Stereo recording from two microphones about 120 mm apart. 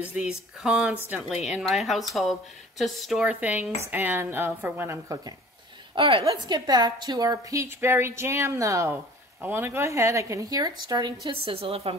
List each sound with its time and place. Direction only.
0.1 s a woman's voice: 10° right (ahead or behind); by 5.3 s 25° right (ahead or behind)
5.9 s a woman's voice: 50° right (ahead or behind)
6.2 s a woman's voice: 35° right (ahead or behind); by 12.0 s 50° right (ahead or behind)